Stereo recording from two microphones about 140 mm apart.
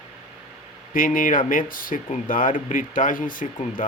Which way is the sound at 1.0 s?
80° left.